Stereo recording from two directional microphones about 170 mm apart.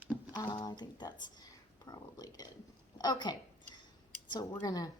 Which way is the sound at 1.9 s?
25° left (ahead or behind).